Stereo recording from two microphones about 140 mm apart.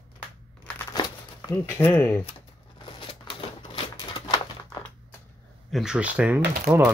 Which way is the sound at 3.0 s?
35° left (ahead or behind).